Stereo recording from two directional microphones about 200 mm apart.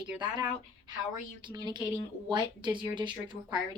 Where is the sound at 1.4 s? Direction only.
20° right (ahead or behind).